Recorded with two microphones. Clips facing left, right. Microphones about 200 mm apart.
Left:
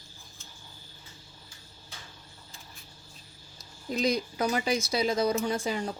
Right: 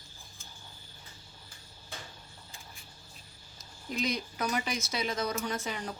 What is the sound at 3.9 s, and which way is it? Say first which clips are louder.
Speech: left 6 dB; 35° left (ahead or behind).